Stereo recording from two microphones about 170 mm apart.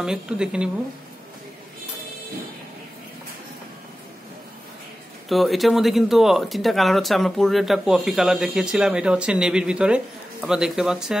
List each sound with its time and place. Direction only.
0.0 s speech: 5° right (ahead or behind)
5.3 s speech: centre (ahead or behind)